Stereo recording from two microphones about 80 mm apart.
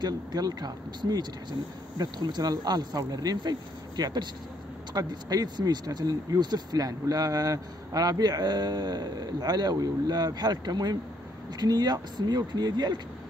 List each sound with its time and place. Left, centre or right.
0.0 s speech: right